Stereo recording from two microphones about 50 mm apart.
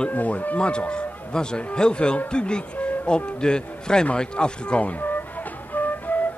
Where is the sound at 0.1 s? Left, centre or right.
Left.